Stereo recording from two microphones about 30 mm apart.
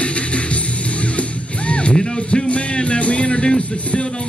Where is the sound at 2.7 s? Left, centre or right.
Left.